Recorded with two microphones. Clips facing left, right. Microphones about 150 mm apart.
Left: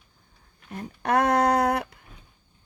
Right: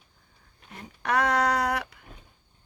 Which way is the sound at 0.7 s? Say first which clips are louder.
Left 4 dB; 50° left (ahead or behind).